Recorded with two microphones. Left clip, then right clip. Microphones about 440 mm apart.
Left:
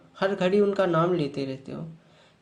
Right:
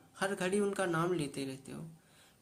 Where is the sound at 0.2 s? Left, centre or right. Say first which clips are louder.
Left 11 dB; right.